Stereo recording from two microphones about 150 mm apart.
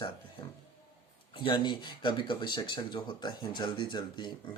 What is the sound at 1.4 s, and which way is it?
Speech, 30° left (ahead or behind).